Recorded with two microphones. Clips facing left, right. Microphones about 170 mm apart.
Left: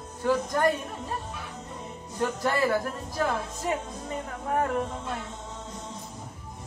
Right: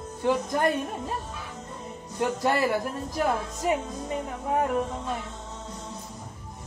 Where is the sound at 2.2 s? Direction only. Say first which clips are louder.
Right 1 dB; 20° right (ahead or behind).